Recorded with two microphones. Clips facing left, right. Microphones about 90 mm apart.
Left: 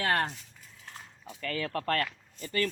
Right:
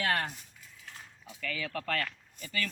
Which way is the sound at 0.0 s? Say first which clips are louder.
Left 3 dB; 35° left (ahead or behind).